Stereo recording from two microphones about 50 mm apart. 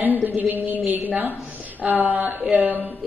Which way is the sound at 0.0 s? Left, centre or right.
Right.